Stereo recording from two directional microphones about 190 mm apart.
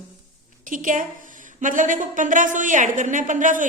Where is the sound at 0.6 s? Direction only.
45° right (ahead or behind).